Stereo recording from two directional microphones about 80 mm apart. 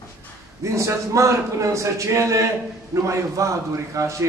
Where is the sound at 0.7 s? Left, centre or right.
Right.